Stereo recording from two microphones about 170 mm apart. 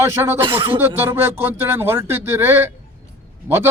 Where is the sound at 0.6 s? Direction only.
15° right (ahead or behind).